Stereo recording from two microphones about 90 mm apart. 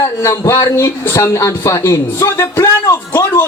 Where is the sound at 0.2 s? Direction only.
35° left (ahead or behind).